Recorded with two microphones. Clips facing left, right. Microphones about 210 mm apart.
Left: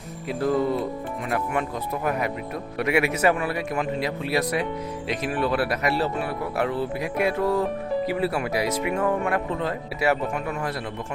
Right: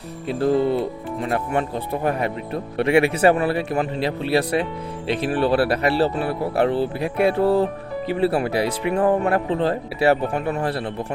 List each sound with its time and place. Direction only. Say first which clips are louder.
0.3 s a man's voice: right 4 dB; 30° right (ahead or behind)